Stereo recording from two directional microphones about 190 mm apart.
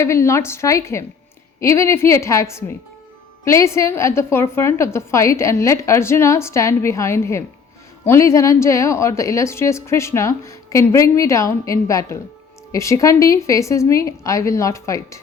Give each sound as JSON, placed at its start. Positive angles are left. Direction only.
{"t": 0.0, "sound": "a woman's voice", "side_deg": 15}